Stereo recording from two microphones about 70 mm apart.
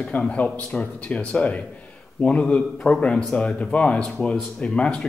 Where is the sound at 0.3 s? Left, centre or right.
Centre.